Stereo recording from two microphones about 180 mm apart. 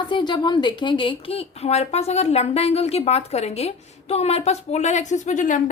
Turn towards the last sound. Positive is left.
turn(degrees=45)  # may be behind; listen again after turning